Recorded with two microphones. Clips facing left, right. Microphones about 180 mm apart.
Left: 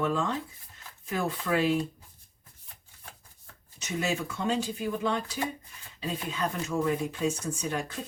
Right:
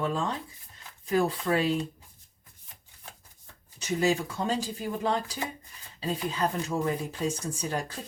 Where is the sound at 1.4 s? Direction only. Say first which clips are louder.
Even; 30° right (ahead or behind).